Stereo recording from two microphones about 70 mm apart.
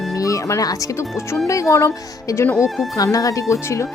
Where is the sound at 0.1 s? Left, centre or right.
Left.